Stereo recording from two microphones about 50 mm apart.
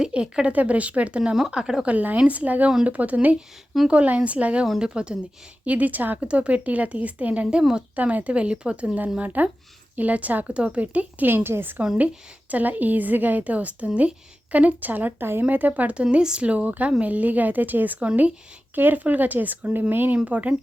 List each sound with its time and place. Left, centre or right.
0.0 s speech: centre
1.9 s a woman's voice: right
5.6 s a woman's voice: right
6.2 s speech: right
9.2 s a woman's voice: right
11.3 s a woman's voice: right
11.9 s a woman's voice: right
20.2 s a woman's voice: right